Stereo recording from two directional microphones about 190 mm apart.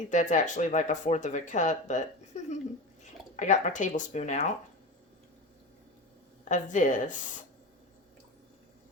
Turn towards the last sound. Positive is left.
turn(degrees=40)  # may be behind; listen again after turning